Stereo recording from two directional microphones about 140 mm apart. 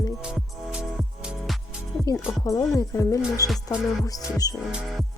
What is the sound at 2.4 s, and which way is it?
Speech, 25° left (ahead or behind).